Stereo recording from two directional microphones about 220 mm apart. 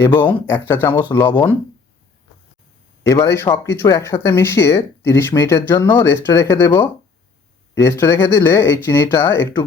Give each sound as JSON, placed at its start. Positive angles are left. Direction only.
{"t": 0.0, "sound": "speech", "side_deg": 10}
{"t": 3.0, "sound": "speech", "side_deg": 15}